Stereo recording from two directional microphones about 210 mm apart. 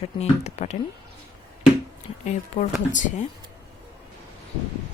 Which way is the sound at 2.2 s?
35° left (ahead or behind).